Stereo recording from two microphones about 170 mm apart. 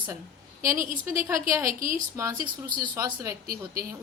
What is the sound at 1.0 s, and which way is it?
A woman's voice, 15° right (ahead or behind).